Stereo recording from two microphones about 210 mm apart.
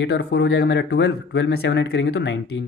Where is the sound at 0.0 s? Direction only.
50° left (ahead or behind).